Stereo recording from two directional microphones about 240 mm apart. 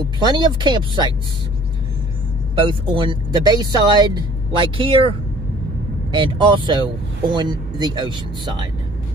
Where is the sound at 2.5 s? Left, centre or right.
Right.